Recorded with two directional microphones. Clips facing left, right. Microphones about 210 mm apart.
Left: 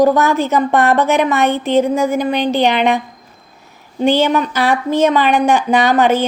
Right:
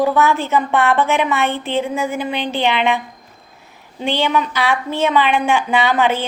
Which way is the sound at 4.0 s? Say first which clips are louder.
Left 5 dB; 45° left (ahead or behind).